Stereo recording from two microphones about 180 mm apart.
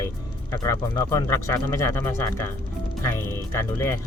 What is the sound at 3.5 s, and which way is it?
Speech, 15° left (ahead or behind).